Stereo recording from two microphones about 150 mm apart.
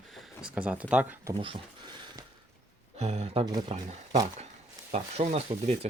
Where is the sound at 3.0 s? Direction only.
45° right (ahead or behind).